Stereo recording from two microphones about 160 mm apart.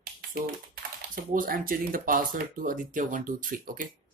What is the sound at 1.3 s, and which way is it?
Speech, 60° right (ahead or behind).